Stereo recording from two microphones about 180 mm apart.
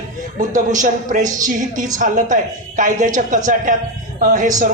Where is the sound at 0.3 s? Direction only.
45° right (ahead or behind).